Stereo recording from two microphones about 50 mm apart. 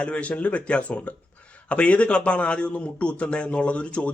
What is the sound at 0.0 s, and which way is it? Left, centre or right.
A man's voice, left.